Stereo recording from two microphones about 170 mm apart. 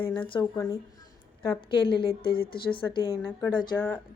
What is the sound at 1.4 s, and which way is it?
A woman's voice, 30° left (ahead or behind).